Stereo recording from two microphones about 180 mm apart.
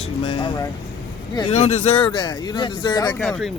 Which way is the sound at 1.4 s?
35° left (ahead or behind).